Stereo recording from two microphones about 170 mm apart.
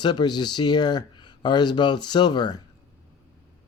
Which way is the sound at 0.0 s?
25° left (ahead or behind).